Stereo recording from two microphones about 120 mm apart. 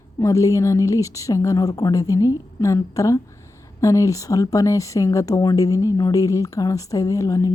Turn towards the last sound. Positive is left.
turn(degrees=30)  # may be behind; listen again after turning